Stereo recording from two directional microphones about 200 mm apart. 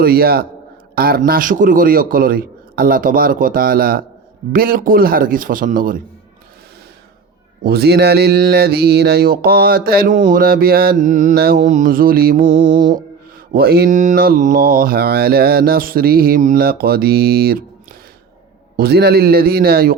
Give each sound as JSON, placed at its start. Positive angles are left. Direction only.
{"t": 0.0, "sound": "speech", "side_deg": -50}
{"t": 7.6, "sound": "speech", "side_deg": -55}
{"t": 13.5, "sound": "speech", "side_deg": -50}
{"t": 18.8, "sound": "speech", "side_deg": -55}